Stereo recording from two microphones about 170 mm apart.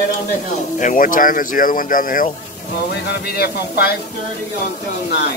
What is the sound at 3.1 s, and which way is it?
Speech, 65° left (ahead or behind).